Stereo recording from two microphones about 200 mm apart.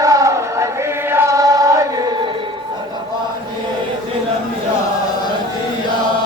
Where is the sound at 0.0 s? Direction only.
15° right (ahead or behind).